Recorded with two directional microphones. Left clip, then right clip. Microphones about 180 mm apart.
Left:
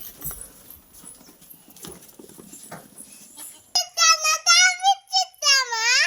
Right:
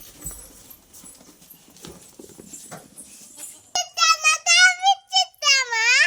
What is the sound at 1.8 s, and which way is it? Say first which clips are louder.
Clip-clop: left 1 dB; 30° left (ahead or behind).